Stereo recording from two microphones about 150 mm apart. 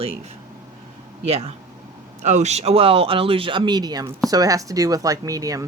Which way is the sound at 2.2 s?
50° right (ahead or behind).